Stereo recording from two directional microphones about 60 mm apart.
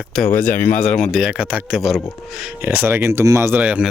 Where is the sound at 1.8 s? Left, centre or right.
Centre.